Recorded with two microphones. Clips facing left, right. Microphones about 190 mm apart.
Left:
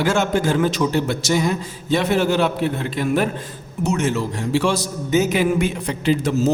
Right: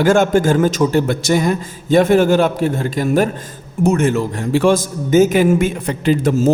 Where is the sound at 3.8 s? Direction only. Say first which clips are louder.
Right 6 dB; 55° right (ahead or behind).